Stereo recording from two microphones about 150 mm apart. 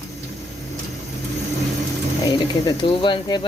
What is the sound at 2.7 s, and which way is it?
Speech, 30° left (ahead or behind).